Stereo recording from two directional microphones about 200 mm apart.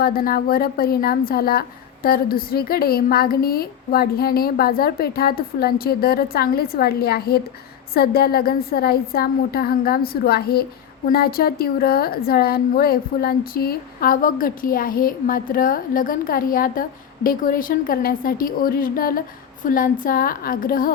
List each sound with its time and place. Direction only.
0.0 s a woman's voice: 50° left (ahead or behind)